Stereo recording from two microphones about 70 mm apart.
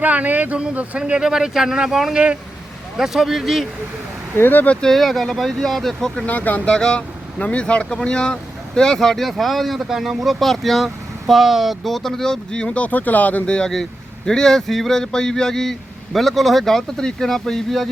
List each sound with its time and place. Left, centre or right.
0.0 s speech: right; by 2.1 s centre
2.1 s speech: centre
3.0 s speech: centre
4.4 s speech: left
4.7 s speech: centre
6.2 s speech: left
6.7 s speech: centre